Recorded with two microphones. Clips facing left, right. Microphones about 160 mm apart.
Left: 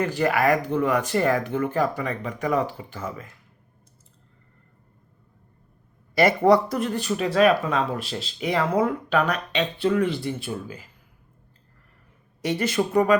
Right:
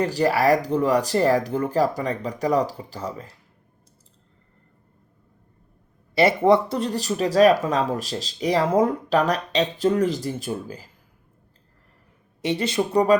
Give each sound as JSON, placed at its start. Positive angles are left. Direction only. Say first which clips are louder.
{"t": 0.0, "sound": "speech", "louder": "right 2 dB", "side_deg": -35}
{"t": 6.1, "sound": "speech", "louder": "right 1 dB", "side_deg": -25}
{"t": 12.4, "sound": "speech", "louder": "right 1 dB", "side_deg": -25}